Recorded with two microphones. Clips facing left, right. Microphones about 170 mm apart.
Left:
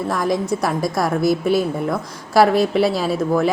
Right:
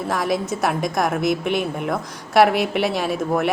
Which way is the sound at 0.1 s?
Centre (ahead or behind).